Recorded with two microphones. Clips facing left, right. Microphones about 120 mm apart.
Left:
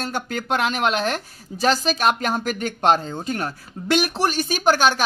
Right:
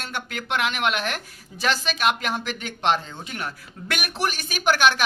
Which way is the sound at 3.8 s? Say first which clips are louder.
Left 7 dB; 30° left (ahead or behind).